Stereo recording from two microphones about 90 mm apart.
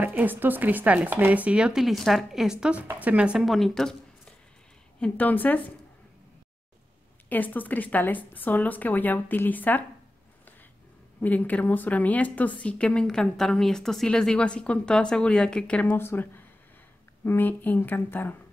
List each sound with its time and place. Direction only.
0.0 s speech: 20° right (ahead or behind); by 2.5 s centre (ahead or behind)
2.6 s speech: 15° right (ahead or behind)
3.4 s speech: centre (ahead or behind)
5.0 s a woman's voice: 20° left (ahead or behind)
7.2 s a woman's voice: 20° left (ahead or behind)
11.1 s a woman's voice: 15° left (ahead or behind)